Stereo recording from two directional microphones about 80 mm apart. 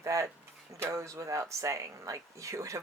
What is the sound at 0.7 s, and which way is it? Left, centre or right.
Speech, right.